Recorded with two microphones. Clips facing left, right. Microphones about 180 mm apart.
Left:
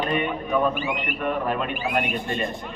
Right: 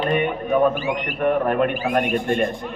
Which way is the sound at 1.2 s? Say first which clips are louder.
Right 7 dB; 55° right (ahead or behind).